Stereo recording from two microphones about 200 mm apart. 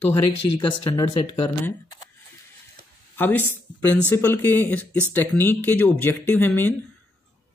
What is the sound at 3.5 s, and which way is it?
Speech, 10° right (ahead or behind).